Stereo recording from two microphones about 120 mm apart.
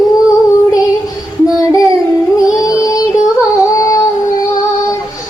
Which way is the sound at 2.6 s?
30° left (ahead or behind).